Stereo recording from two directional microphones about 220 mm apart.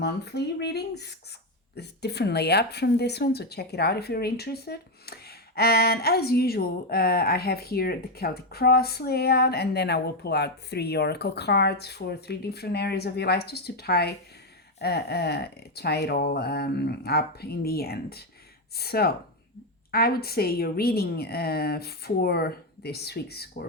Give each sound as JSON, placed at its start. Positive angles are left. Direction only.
{"t": 0.0, "sound": "speech", "side_deg": 50}